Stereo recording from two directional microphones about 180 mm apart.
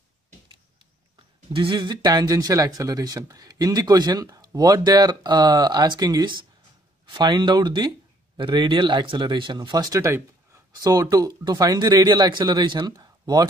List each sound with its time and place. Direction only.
1.5 s speech: 30° right (ahead or behind)